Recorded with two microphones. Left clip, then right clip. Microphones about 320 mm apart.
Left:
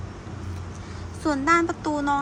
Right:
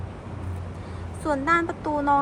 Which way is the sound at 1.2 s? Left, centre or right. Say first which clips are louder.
Left 2 dB; centre.